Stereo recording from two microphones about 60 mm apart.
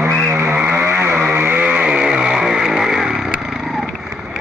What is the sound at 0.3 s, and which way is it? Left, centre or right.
Vehicle, right.